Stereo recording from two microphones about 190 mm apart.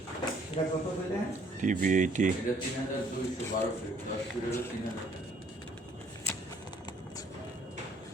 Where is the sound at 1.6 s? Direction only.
45° right (ahead or behind).